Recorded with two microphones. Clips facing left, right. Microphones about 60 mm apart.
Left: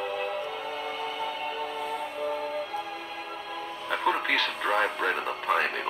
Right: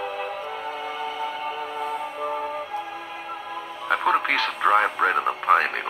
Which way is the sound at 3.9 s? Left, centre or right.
Right.